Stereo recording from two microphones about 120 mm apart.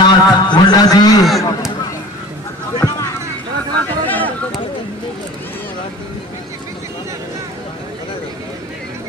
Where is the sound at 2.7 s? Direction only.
35° left (ahead or behind).